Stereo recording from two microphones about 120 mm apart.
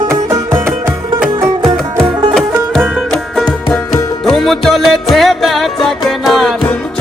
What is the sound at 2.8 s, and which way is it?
Music, 5° right (ahead or behind).